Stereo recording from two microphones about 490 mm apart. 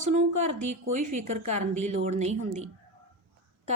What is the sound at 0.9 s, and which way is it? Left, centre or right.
Speech, centre.